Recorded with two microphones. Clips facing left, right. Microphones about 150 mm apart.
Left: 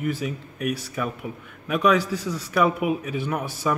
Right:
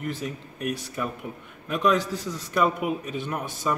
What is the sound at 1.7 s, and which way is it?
Speech, 70° left (ahead or behind).